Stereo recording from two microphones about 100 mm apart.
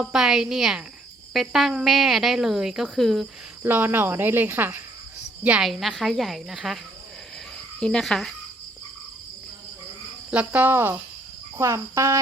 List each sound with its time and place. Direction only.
0.0 s speech: 5° right (ahead or behind)
3.6 s cricket: 20° right (ahead or behind)
5.4 s a woman's voice: 15° right (ahead or behind)
5.6 s speech: centre (ahead or behind)
7.8 s speech: 5° left (ahead or behind)
10.3 s speech: 15° right (ahead or behind)
11.5 s cricket: 30° right (ahead or behind)